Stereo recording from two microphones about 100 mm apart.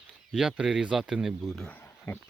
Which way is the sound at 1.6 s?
15° left (ahead or behind).